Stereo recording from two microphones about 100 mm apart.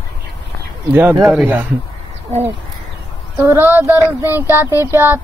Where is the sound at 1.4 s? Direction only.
15° right (ahead or behind).